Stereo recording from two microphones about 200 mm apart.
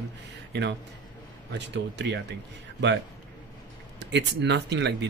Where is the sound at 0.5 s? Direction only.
60° right (ahead or behind).